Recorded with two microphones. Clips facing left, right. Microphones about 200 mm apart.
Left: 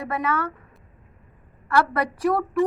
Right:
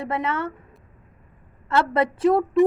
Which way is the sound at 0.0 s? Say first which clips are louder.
Even; 25° right (ahead or behind).